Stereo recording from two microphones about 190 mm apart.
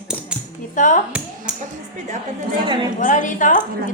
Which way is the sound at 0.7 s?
40° left (ahead or behind).